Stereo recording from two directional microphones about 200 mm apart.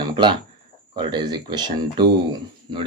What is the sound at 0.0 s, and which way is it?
Chicken, 20° right (ahead or behind).